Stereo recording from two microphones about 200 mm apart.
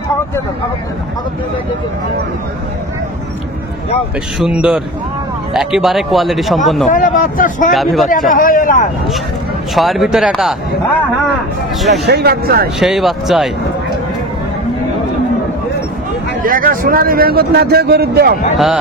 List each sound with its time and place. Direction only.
4.4 s speech: 5° right (ahead or behind)
6.9 s speech: 40° left (ahead or behind)
7.7 s speech: centre (ahead or behind)
8.3 s speech: 45° left (ahead or behind)
9.8 s speech: centre (ahead or behind)
11.9 s a man's voice: 55° right (ahead or behind)
12.7 s speech: centre (ahead or behind)
16.4 s a man's voice: 45° right (ahead or behind)